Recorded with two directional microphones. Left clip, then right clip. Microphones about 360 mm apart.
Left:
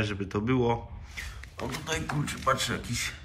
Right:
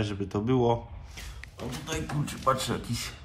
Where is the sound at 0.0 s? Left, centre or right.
Centre.